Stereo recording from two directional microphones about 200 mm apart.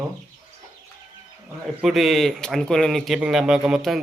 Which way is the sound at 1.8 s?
Centre (ahead or behind).